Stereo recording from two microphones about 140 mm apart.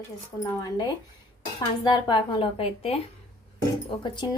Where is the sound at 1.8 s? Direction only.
35° left (ahead or behind).